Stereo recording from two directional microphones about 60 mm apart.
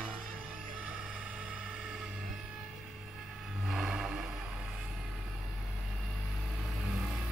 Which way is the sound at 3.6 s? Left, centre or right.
Centre.